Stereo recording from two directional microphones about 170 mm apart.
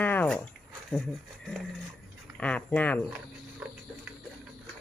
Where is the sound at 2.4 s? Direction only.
10° left (ahead or behind).